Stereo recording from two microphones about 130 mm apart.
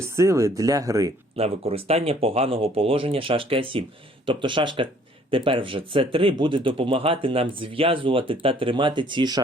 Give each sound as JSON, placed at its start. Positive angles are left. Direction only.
{"t": 0.2, "sound": "speech", "side_deg": -25}
{"t": 1.4, "sound": "speech", "side_deg": -50}